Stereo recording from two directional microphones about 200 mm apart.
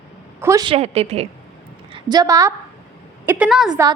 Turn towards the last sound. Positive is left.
turn(degrees=0)  # may be behind; listen again after turning